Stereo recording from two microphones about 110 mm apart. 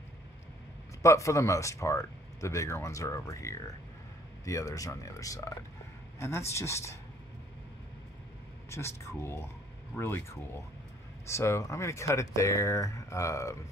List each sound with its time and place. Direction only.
1.0 s speech: 30° left (ahead or behind)
8.6 s speech: 25° left (ahead or behind)
11.2 s speech: 25° left (ahead or behind)